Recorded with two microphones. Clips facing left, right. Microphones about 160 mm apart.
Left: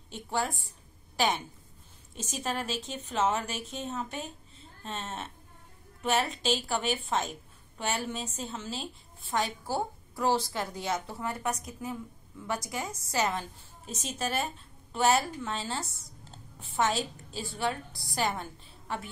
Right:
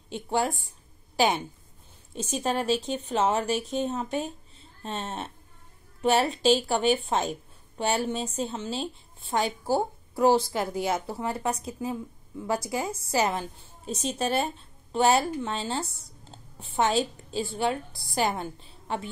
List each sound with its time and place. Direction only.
0.1 s a woman's voice: 30° right (ahead or behind)
2.1 s a woman's voice: 30° right (ahead or behind)
16.3 s a sound: 30° right (ahead or behind)
18.2 s a woman's voice: 30° right (ahead or behind)